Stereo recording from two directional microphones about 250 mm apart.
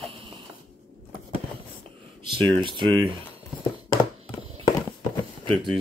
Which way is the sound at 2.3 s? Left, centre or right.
Centre.